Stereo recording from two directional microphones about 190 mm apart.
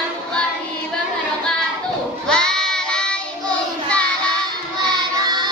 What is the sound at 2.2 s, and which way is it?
Child singing, 5° left (ahead or behind).